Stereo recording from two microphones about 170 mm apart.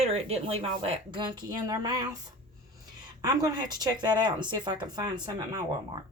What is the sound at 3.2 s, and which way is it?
Speech, 20° right (ahead or behind).